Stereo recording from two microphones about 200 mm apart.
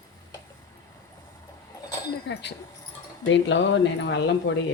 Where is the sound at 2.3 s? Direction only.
60° left (ahead or behind).